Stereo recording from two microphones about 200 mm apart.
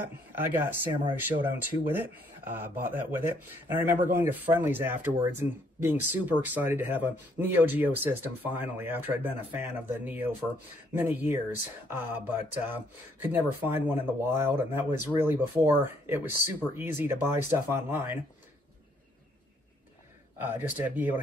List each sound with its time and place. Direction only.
0.0 s speech: 10° right (ahead or behind)
20.3 s speech: 10° right (ahead or behind)